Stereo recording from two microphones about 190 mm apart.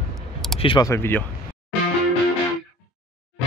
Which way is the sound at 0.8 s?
10° left (ahead or behind).